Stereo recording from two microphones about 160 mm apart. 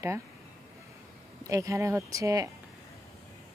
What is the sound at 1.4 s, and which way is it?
Speech, 20° right (ahead or behind).